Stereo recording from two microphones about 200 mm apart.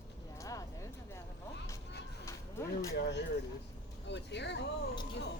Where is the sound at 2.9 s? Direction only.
60° left (ahead or behind).